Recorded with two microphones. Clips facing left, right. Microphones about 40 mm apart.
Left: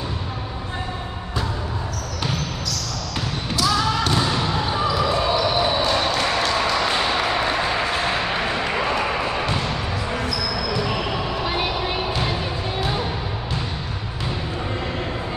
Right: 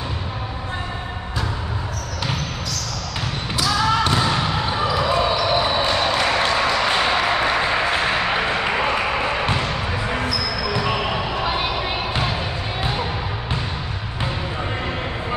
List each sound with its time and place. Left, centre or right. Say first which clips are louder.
3.5 s basketball bounce: right 2 dB; right